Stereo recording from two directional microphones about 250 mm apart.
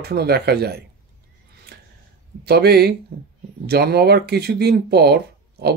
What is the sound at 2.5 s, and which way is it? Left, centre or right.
Speech, right.